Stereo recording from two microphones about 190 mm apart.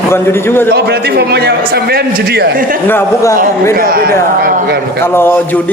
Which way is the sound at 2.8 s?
15° left (ahead or behind).